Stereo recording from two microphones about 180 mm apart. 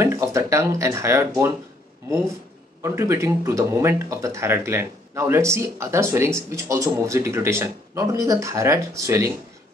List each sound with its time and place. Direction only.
0.0 s speech: 15° right (ahead or behind)
2.8 s speech: 15° right (ahead or behind)